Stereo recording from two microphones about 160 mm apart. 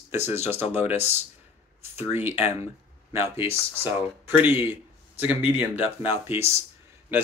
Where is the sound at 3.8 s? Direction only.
15° right (ahead or behind).